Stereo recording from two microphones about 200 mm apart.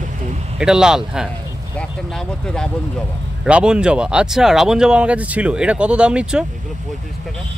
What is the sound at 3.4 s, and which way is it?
Speech, 5° right (ahead or behind).